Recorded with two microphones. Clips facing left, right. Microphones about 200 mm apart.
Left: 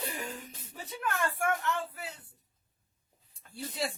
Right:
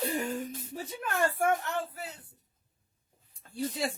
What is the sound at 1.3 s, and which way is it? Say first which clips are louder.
Speech: right 3 dB; 35° right (ahead or behind).